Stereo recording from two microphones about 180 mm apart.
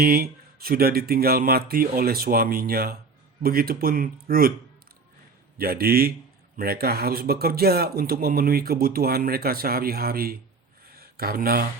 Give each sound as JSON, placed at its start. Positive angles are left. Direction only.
{"t": 0.0, "sound": "speech", "side_deg": -55}
{"t": 5.5, "sound": "speech", "side_deg": -55}